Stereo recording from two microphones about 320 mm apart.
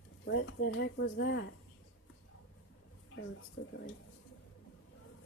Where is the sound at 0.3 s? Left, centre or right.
Left.